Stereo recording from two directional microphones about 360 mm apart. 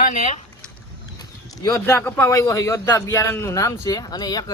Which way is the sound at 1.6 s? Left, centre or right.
Centre.